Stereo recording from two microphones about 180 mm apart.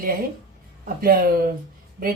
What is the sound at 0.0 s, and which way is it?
Speech, 50° right (ahead or behind).